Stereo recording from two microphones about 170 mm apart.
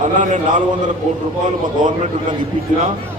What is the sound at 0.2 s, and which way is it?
Speech, 45° right (ahead or behind).